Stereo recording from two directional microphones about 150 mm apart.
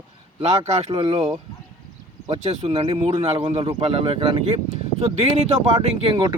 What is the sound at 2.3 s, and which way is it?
A man's voice, 40° right (ahead or behind).